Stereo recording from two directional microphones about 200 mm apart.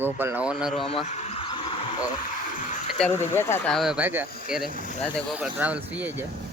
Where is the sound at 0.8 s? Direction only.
35° left (ahead or behind).